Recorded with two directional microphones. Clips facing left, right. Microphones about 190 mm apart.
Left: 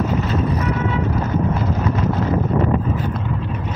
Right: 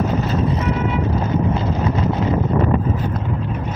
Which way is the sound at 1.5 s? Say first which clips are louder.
Right 1 dB; 25° right (ahead or behind).